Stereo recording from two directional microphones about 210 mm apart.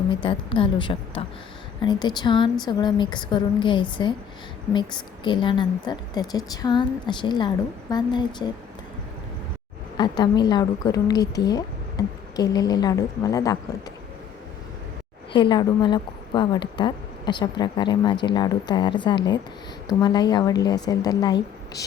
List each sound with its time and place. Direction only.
0.1 s a woman's voice: 25° left (ahead or behind)
10.0 s a woman's voice: 20° left (ahead or behind)
15.3 s a woman's voice: 20° left (ahead or behind)